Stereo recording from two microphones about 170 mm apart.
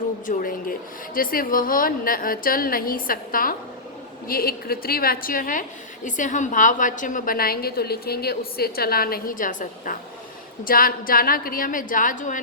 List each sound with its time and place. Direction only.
0.3 s a woman's voice: 55° left (ahead or behind)